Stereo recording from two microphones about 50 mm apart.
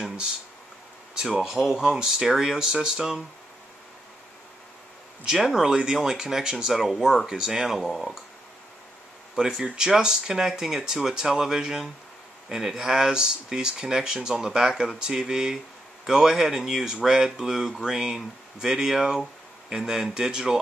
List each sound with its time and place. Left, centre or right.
1.1 s speech: centre
5.2 s speech: centre
5.7 s speech: centre
9.3 s speech: centre